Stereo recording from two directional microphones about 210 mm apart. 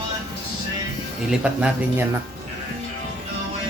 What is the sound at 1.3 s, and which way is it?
Speech, 5° right (ahead or behind).